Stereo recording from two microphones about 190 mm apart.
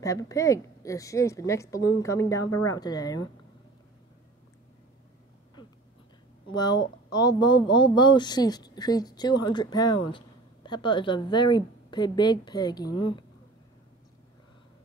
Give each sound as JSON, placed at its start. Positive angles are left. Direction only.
{"t": 0.0, "sound": "a woman's voice", "side_deg": 15}
{"t": 6.5, "sound": "speech", "side_deg": 20}